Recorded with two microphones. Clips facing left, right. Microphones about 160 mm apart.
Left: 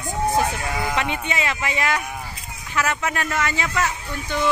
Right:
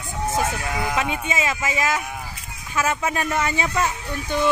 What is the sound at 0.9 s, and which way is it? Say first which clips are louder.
A woman's voice: right 1 dB; 5° right (ahead or behind).